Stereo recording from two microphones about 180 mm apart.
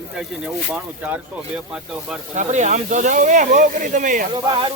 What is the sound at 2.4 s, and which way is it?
Speech, 40° right (ahead or behind).